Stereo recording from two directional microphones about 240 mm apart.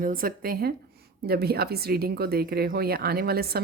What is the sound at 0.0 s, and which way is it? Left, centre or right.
A woman's voice, right.